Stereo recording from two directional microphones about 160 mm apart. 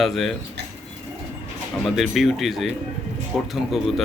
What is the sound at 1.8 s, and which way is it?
Speech, centre (ahead or behind).